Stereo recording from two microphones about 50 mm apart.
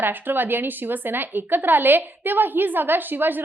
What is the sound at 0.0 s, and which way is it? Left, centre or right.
A woman's voice, right.